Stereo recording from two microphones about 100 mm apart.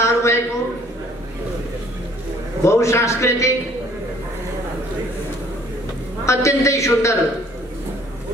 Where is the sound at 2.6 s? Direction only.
30° left (ahead or behind).